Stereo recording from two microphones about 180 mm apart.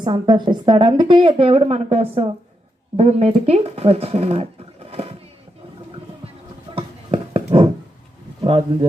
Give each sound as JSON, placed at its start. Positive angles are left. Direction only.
{"t": 0.0, "sound": "a woman's voice", "side_deg": -25}
{"t": 6.7, "sound": "a sound", "side_deg": -30}
{"t": 8.4, "sound": "speech", "side_deg": -35}